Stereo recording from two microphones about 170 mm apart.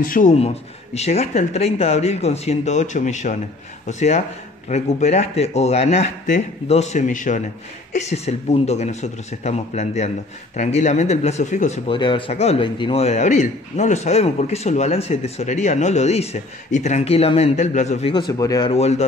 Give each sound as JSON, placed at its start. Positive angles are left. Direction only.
{"t": 0.0, "sound": "a man's voice", "side_deg": 50}
{"t": 11.9, "sound": "a man's voice", "side_deg": 30}
{"t": 18.4, "sound": "speech", "side_deg": 20}
{"t": 18.7, "sound": "a man's voice", "side_deg": 40}